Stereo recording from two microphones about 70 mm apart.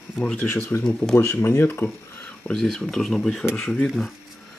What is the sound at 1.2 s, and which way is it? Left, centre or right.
Speech, left.